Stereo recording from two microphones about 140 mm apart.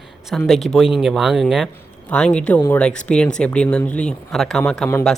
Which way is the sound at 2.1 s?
5° left (ahead or behind).